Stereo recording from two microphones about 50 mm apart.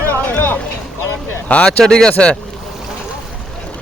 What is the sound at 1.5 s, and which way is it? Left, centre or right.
Speech, left.